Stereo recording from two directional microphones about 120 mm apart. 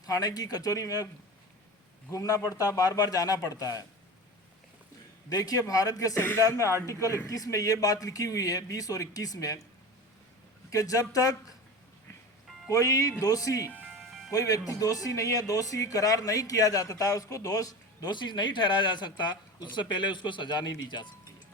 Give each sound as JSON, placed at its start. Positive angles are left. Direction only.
{"t": 0.0, "sound": "speech", "side_deg": 30}
{"t": 2.0, "sound": "speech", "side_deg": 30}
{"t": 5.3, "sound": "speech", "side_deg": 30}
{"t": 10.7, "sound": "speech", "side_deg": 30}
{"t": 12.6, "sound": "speech", "side_deg": 25}
{"t": 13.7, "sound": "music", "side_deg": -15}
{"t": 14.3, "sound": "speech", "side_deg": 30}